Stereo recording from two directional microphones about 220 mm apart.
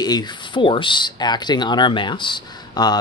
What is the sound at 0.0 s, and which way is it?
Speech, 20° left (ahead or behind).